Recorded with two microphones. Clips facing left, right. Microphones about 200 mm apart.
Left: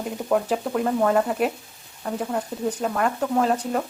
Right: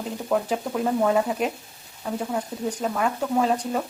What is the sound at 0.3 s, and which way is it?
Speech, centre (ahead or behind).